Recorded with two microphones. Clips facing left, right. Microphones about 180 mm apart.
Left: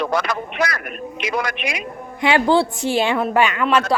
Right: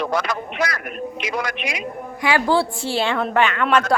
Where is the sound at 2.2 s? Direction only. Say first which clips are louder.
Left 3 dB; 25° left (ahead or behind).